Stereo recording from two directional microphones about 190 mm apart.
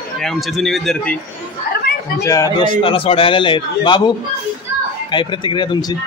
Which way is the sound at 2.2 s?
15° left (ahead or behind).